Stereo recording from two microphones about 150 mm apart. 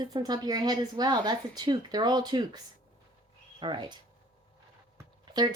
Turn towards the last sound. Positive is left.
turn(degrees=-30)  # may be behind; listen again after turning